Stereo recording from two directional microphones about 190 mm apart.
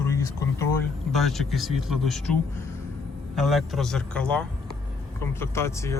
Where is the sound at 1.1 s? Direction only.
Centre (ahead or behind).